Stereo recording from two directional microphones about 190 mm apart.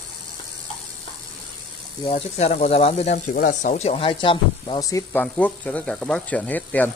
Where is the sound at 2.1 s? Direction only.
35° left (ahead or behind); by 5.2 s 15° left (ahead or behind).